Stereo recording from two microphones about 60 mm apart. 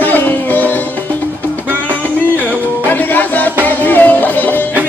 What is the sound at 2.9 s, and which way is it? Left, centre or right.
Music, left.